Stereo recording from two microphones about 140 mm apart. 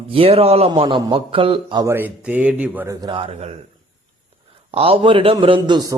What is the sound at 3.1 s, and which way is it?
Speech, 45° right (ahead or behind).